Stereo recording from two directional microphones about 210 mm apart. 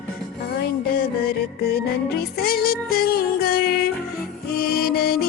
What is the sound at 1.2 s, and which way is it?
Music, 50° left (ahead or behind).